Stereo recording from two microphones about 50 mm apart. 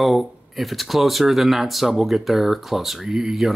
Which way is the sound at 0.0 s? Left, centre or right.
Centre.